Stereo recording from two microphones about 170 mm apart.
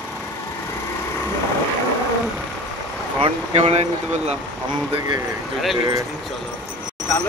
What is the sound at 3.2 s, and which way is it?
Speech, 40° right (ahead or behind).